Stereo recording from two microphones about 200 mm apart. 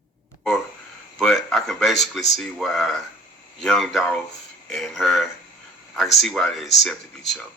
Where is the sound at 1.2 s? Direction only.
Centre (ahead or behind).